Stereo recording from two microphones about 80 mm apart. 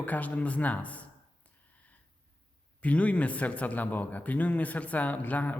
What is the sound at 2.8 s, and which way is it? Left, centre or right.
A man's voice, centre.